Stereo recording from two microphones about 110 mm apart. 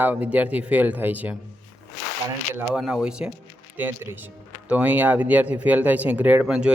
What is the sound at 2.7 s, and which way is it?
Speech, 5° right (ahead or behind).